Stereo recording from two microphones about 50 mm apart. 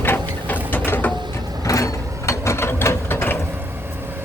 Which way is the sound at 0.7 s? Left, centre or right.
Left.